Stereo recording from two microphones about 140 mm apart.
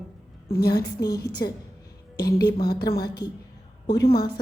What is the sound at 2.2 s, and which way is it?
Speech, 30° left (ahead or behind).